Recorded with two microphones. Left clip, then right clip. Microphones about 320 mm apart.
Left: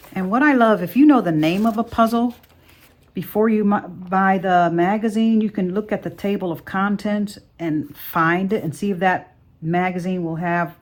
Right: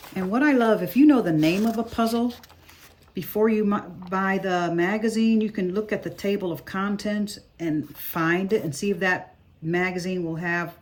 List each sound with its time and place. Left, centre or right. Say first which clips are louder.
0.1 s speech: left 5 dB; centre